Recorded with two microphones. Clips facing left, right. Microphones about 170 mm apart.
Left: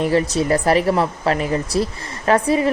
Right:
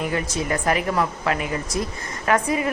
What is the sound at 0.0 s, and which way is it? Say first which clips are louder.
Speech: left 7 dB; 30° left (ahead or behind).